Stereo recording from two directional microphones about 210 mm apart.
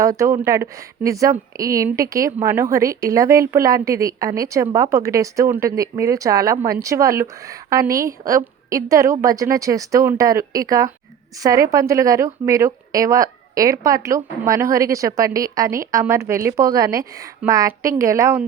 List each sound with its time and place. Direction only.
0.0 s a woman's voice: 15° right (ahead or behind)